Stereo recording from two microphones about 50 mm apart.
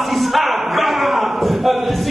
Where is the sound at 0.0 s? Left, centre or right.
Centre.